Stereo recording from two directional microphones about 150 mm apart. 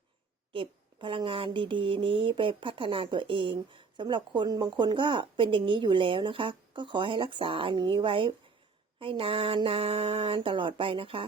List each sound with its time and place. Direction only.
0.5 s speech: 35° right (ahead or behind)